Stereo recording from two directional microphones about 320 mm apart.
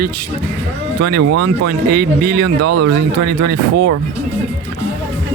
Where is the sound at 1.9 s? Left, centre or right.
Right.